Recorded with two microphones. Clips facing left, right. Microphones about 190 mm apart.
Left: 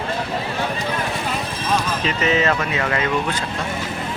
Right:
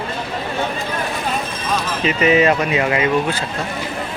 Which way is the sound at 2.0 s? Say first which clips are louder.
Right 9 dB; 10° right (ahead or behind).